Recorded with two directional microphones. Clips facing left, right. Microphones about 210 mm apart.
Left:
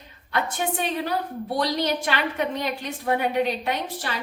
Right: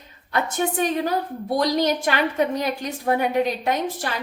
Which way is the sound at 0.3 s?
40° right (ahead or behind).